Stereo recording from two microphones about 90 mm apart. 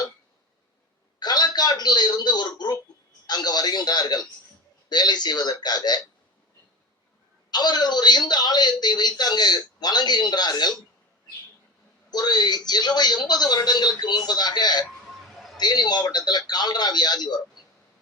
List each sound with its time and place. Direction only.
1.2 s a sound: 50° left (ahead or behind)
3.2 s a man's voice: 50° left (ahead or behind)
7.5 s speech: 50° left (ahead or behind)
12.1 s speech: 50° left (ahead or behind)